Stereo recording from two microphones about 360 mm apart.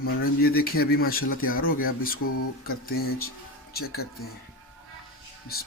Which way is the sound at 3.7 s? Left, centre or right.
Left.